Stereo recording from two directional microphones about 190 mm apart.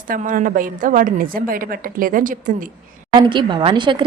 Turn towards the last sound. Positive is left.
turn(degrees=-25)  # may be behind; listen again after turning